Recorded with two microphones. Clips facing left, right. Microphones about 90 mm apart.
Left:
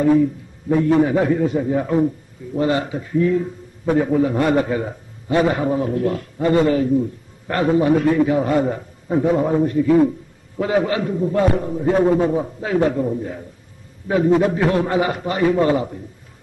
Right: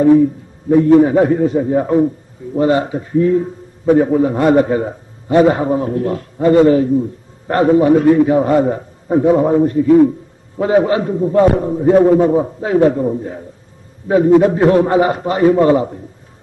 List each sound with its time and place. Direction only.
0.7 s a man's voice: 35° right (ahead or behind)